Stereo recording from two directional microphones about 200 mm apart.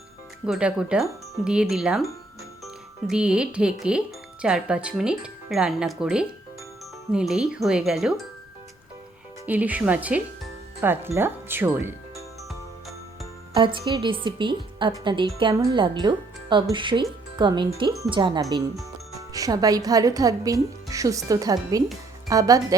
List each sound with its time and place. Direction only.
0.4 s speech: 5° right (ahead or behind)
9.5 s speech: 10° right (ahead or behind)
13.5 s a woman's voice: 25° right (ahead or behind)